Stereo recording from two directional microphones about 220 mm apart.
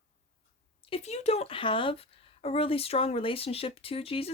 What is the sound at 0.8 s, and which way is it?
Speech, 25° left (ahead or behind).